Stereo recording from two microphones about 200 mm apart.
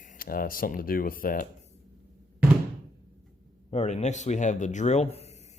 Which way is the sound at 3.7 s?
35° left (ahead or behind).